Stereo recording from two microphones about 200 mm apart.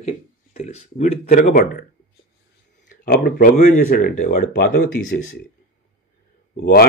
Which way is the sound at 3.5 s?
40° left (ahead or behind).